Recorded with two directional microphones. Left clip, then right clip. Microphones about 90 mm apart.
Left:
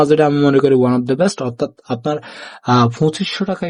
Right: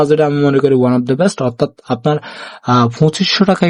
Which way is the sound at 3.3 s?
90° right.